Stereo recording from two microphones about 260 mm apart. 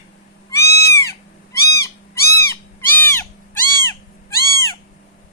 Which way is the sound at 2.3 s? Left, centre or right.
Centre.